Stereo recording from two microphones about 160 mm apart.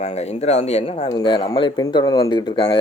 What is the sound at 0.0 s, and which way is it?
Speech, 40° left (ahead or behind).